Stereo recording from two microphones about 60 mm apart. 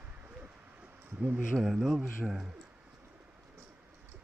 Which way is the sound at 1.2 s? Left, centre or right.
Right.